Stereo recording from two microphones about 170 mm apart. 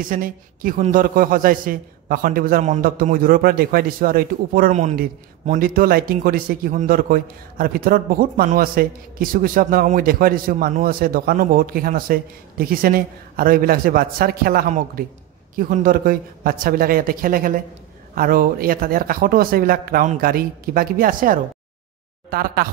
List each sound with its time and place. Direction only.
0.0 s a man's voice: 55° right (ahead or behind)